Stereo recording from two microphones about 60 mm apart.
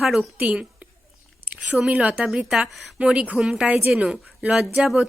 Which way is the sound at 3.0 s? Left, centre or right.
Centre.